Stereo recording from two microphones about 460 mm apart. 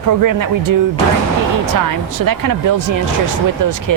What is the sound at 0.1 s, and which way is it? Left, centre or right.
Speech, right.